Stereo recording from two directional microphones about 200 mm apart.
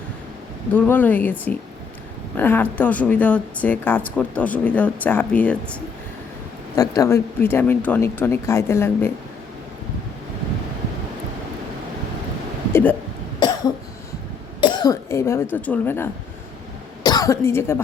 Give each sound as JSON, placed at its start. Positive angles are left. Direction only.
{"t": 0.7, "sound": "speech", "side_deg": 10}
{"t": 6.7, "sound": "speech", "side_deg": 15}
{"t": 12.7, "sound": "a sound", "side_deg": 10}
{"t": 14.6, "sound": "cough", "side_deg": 20}
{"t": 15.5, "sound": "speech", "side_deg": 10}
{"t": 17.0, "sound": "cough", "side_deg": 20}